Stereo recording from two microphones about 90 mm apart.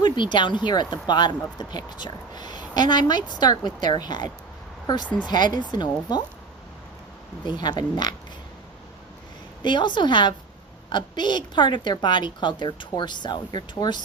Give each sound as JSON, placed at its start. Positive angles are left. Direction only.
{"t": 0.0, "sound": "speech", "side_deg": 60}
{"t": 7.4, "sound": "speech", "side_deg": 55}
{"t": 9.6, "sound": "a woman's voice", "side_deg": 60}